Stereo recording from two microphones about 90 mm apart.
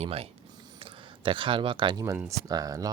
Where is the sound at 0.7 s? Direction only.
75° right (ahead or behind).